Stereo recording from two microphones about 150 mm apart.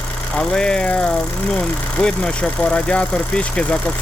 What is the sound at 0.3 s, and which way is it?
Speech, 5° left (ahead or behind).